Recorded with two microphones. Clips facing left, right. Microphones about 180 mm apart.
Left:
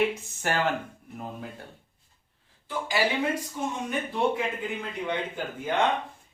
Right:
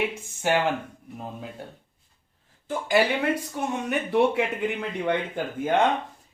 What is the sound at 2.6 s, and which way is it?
Speech, 55° right (ahead or behind).